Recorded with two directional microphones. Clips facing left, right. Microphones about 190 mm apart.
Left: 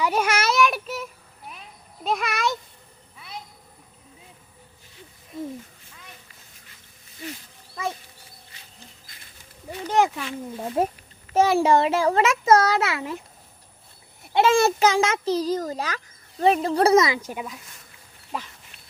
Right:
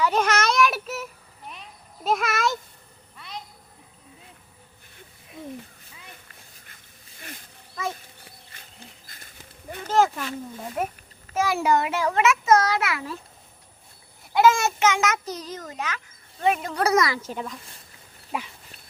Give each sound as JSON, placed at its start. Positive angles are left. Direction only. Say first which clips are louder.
{"t": 0.0, "sound": "child singing", "louder": "right 1 dB", "side_deg": 10}
{"t": 2.0, "sound": "a child's voice", "louder": "right 1 dB", "side_deg": 0}
{"t": 3.2, "sound": "a sound", "louder": "right 1 dB", "side_deg": 10}
{"t": 9.9, "sound": "a sound", "louder": "even", "side_deg": 15}
{"t": 10.8, "sound": "a child's voice", "louder": "left 5 dB", "side_deg": 25}
{"t": 14.3, "sound": "a child's voice", "louder": "left 1 dB", "side_deg": 30}
{"t": 18.3, "sound": "dog", "louder": "right 1 dB", "side_deg": -5}